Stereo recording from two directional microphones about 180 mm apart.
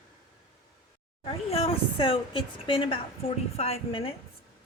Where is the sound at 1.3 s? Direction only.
30° left (ahead or behind).